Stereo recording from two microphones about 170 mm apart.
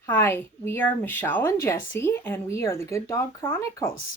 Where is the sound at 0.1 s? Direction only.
15° left (ahead or behind).